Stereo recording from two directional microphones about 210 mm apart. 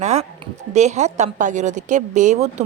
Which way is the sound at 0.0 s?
30° right (ahead or behind).